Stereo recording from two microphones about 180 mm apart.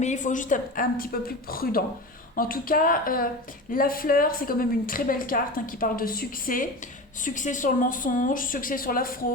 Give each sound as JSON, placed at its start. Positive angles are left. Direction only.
{"t": 0.0, "sound": "a woman's voice", "side_deg": 45}